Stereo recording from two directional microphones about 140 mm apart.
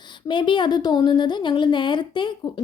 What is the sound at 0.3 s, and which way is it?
A woman's voice, 35° left (ahead or behind).